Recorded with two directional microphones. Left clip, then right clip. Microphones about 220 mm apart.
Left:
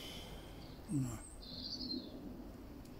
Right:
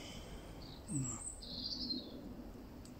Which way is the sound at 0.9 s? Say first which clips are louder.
Left 3 dB; 35° left (ahead or behind).